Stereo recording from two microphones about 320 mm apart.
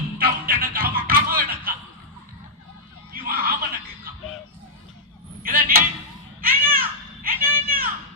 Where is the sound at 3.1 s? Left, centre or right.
Right.